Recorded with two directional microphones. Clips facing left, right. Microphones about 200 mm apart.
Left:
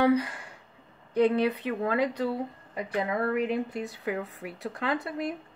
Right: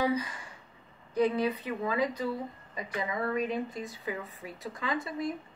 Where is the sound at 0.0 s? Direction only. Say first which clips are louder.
Left 6 dB; 65° left (ahead or behind).